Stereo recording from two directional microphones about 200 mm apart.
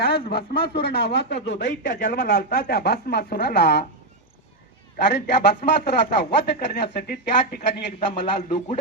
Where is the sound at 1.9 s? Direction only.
45° left (ahead or behind).